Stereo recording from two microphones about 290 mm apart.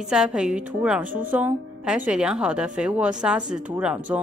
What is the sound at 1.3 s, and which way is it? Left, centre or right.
Speech, centre.